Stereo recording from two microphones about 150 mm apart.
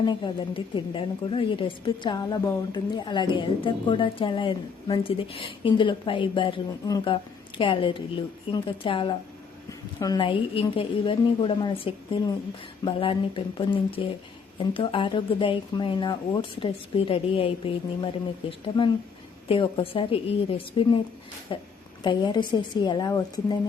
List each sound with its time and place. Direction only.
0.0 s a woman's voice: 30° left (ahead or behind)
9.6 s a woman's voice: 25° left (ahead or behind)